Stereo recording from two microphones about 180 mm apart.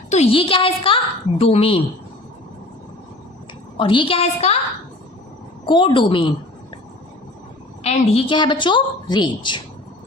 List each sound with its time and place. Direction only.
0.1 s a woman's voice: 35° left (ahead or behind)
3.8 s a woman's voice: 30° left (ahead or behind)
5.6 s a woman's voice: 25° left (ahead or behind)
7.9 s a woman's voice: 30° left (ahead or behind)